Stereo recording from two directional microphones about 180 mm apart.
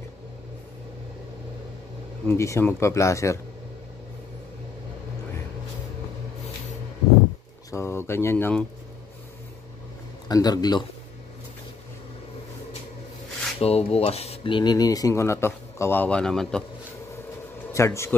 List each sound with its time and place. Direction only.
2.2 s speech: 15° left (ahead or behind)
7.7 s speech: 15° left (ahead or behind)
10.2 s speech: 20° left (ahead or behind)
13.6 s speech: 35° left (ahead or behind); by 16.6 s 5° left (ahead or behind)
17.7 s speech: 15° left (ahead or behind)